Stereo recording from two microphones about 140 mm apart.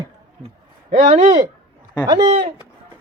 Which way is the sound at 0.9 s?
55° right (ahead or behind).